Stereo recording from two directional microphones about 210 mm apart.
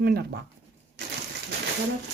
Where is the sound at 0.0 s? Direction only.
45° right (ahead or behind).